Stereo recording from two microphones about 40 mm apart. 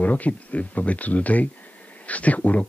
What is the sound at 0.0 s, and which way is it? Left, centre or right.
A man's voice, left.